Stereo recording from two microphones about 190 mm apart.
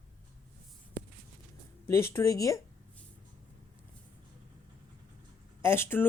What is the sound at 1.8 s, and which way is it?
Speech, 15° left (ahead or behind).